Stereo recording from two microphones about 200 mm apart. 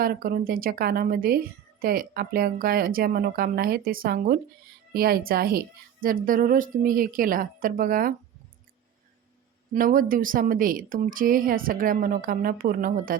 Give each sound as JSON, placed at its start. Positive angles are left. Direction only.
{"t": 0.0, "sound": "a woman's voice", "side_deg": -45}
{"t": 9.7, "sound": "a woman's voice", "side_deg": -45}